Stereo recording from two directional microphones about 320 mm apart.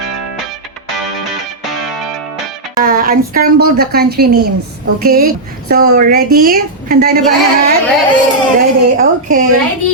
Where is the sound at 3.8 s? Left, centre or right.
Right.